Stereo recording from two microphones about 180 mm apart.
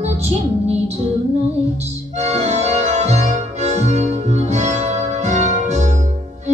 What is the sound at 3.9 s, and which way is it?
Music, 40° right (ahead or behind).